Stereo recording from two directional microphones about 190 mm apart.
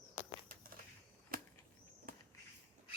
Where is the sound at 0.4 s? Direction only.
50° right (ahead or behind).